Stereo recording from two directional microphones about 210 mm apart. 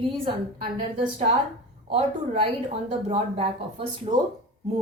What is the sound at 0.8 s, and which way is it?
Speech, 30° right (ahead or behind).